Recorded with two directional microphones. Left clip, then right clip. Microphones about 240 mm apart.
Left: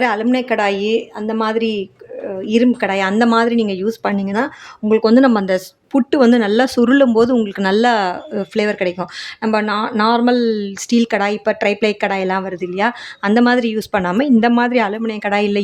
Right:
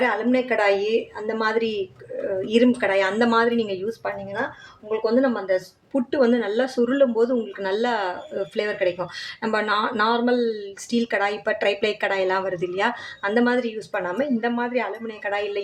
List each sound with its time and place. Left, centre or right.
0.0 s a woman's voice: left